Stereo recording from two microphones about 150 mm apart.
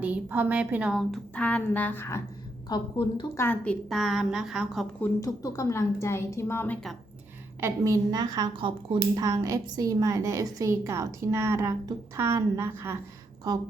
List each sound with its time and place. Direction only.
0.0 s a woman's voice: 10° right (ahead or behind)
1.4 s a woman's voice: 10° left (ahead or behind)
2.6 s a woman's voice: 30° left (ahead or behind)
3.3 s a woman's voice: 15° left (ahead or behind); by 4.9 s 5° right (ahead or behind)
4.9 s a woman's voice: 10° left (ahead or behind)
7.6 s a woman's voice: 25° right (ahead or behind)